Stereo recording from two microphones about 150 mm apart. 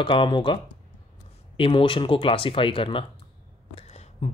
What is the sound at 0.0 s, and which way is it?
Speech, 35° left (ahead or behind).